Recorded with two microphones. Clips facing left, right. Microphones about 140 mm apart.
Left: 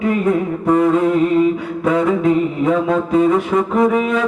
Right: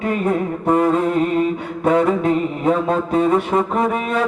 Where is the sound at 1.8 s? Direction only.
30° right (ahead or behind).